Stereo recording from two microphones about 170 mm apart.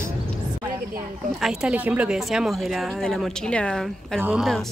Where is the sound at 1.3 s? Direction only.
5° right (ahead or behind).